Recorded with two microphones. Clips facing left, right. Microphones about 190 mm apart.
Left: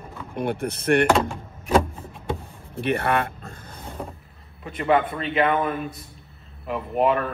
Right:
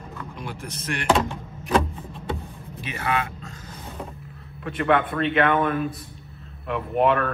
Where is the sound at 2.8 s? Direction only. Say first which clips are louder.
Left 5 dB; 60° left (ahead or behind).